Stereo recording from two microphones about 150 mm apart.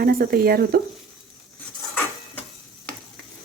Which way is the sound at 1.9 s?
10° left (ahead or behind).